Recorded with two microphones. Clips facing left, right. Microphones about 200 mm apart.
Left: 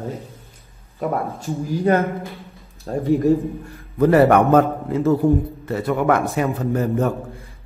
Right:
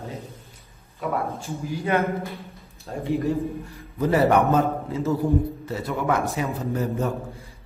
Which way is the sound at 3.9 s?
60° left (ahead or behind).